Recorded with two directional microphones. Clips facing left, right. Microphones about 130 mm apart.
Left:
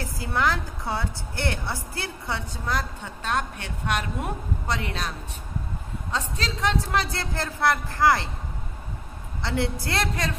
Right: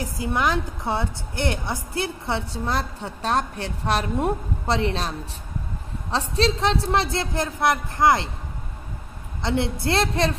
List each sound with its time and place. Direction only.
0.0 s a woman's voice: 15° right (ahead or behind)
6.1 s a woman's voice: 30° right (ahead or behind)
9.4 s a woman's voice: 20° right (ahead or behind)